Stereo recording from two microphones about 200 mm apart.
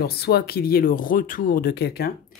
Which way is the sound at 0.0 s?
50° left (ahead or behind).